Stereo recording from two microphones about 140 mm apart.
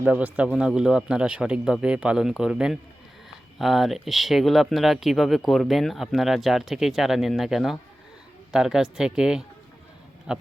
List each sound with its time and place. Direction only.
0.0 s a man's voice: 10° right (ahead or behind)